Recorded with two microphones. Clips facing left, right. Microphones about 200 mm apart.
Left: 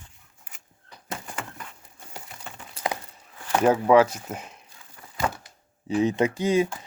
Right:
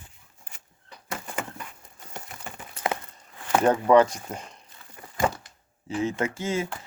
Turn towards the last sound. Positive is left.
turn(degrees=15)  # may be behind; listen again after turning